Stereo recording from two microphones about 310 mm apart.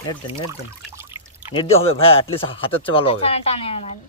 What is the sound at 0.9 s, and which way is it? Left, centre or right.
Trickle, centre.